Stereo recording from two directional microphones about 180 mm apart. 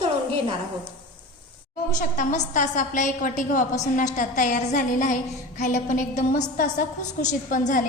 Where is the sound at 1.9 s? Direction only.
45° left (ahead or behind).